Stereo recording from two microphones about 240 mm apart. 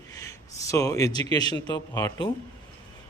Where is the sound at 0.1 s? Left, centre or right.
Centre.